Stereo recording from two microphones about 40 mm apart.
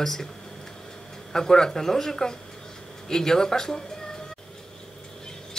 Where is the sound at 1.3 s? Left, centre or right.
Centre.